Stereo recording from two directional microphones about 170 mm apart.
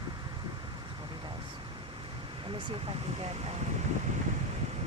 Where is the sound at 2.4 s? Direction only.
30° right (ahead or behind).